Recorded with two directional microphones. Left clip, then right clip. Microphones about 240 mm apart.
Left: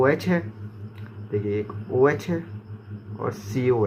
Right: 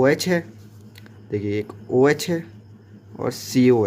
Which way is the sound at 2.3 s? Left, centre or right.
Right.